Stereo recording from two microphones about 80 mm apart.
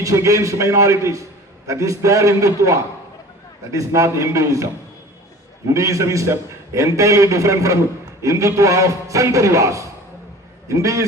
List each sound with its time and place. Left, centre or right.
0.0 s a man's voice: right
5.7 s a man's voice: right